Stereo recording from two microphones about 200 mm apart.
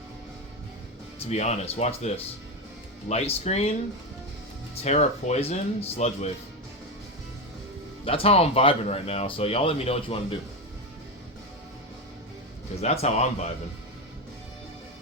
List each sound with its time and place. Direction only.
1.3 s speech: 35° left (ahead or behind)
4.8 s speech: 35° left (ahead or behind)
8.0 s speech: 30° left (ahead or behind)
12.8 s speech: 30° left (ahead or behind)